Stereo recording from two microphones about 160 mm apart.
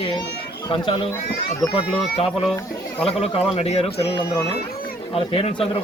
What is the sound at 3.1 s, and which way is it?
Speech, 40° left (ahead or behind).